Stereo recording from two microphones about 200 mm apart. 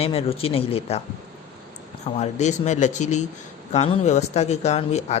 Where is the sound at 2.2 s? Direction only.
35° left (ahead or behind).